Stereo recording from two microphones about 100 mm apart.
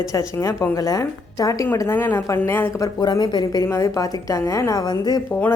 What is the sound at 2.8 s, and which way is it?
A woman's voice, 40° left (ahead or behind).